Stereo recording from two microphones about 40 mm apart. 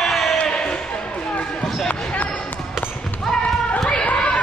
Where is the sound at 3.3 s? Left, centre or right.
Left.